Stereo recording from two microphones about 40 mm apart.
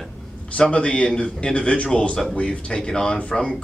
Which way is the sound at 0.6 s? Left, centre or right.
Left.